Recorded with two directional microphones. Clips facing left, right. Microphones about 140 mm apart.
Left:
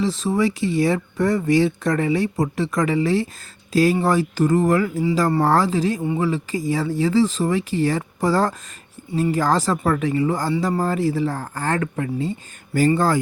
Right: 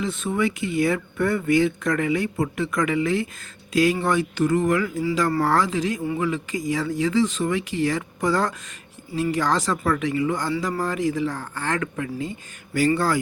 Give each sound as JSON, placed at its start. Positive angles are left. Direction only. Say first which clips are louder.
{"t": 0.0, "sound": "speech", "louder": "left 4 dB", "side_deg": 30}